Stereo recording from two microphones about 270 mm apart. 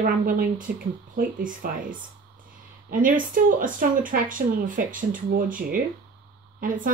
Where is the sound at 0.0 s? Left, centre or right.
Right.